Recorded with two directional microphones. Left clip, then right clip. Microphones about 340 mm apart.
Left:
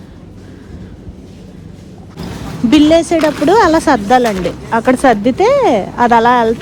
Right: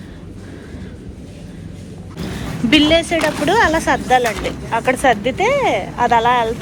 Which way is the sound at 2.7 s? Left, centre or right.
Centre.